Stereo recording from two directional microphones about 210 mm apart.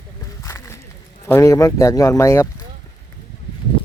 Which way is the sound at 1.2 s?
15° left (ahead or behind).